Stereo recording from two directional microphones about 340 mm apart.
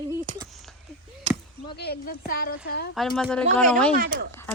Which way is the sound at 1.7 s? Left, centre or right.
Left.